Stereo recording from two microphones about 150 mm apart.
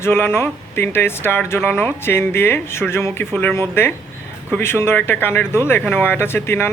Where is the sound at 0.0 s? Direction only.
15° left (ahead or behind).